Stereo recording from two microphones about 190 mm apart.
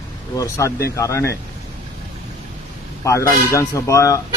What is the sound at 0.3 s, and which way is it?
Speech, 15° left (ahead or behind).